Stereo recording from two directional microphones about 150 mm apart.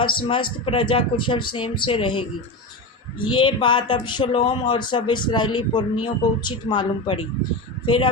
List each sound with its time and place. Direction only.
0.0 s speech: 35° left (ahead or behind)
3.2 s speech: 35° left (ahead or behind)